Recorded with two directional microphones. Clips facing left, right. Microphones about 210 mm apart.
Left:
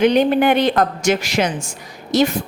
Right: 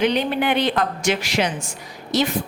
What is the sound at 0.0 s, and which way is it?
A woman's voice, 45° left (ahead or behind).